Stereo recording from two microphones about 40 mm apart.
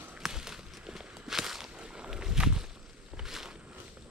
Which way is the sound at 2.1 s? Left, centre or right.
Centre.